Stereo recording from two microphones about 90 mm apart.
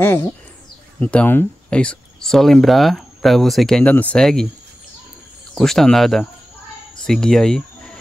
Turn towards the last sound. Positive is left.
turn(degrees=5)  # may be behind; listen again after turning